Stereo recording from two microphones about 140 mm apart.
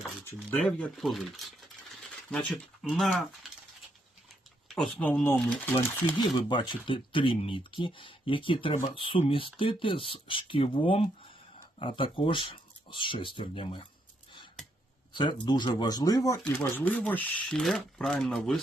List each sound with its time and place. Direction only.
0.3 s speech: 10° left (ahead or behind)
4.7 s speech: 5° left (ahead or behind)
6.1 s speech: 35° left (ahead or behind)
15.1 s speech: 35° left (ahead or behind)
16.5 s speech: 15° left (ahead or behind)